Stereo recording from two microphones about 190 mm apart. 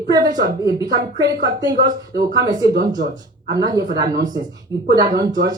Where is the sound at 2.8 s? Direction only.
45° right (ahead or behind).